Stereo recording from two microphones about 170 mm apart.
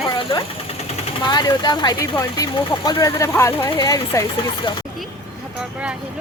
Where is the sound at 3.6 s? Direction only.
20° left (ahead or behind).